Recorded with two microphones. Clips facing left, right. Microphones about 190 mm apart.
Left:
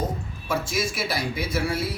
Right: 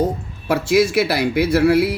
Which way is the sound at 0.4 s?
70° right (ahead or behind).